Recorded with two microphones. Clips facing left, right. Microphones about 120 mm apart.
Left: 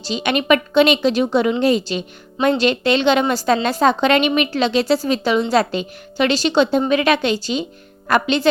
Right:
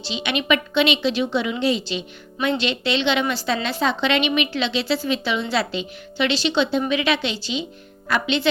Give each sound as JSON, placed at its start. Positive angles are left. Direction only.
{"t": 0.0, "sound": "a woman's voice", "side_deg": 45}